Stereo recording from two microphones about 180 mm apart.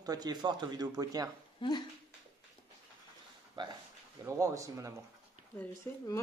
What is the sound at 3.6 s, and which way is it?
Speech, 25° right (ahead or behind).